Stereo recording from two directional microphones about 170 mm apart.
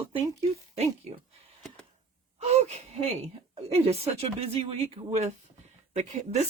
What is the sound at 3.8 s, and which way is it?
Speech, 35° right (ahead or behind).